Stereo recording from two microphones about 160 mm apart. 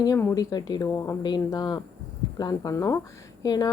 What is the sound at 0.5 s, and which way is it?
Speech, 25° left (ahead or behind).